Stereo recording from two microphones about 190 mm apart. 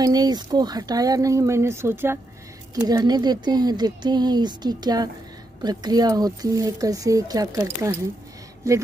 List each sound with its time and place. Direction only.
0.0 s speech: 20° right (ahead or behind)